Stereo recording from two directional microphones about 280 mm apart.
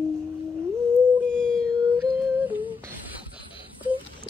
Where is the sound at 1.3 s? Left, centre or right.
Centre.